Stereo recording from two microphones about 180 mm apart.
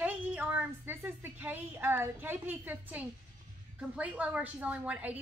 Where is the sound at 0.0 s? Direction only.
10° right (ahead or behind).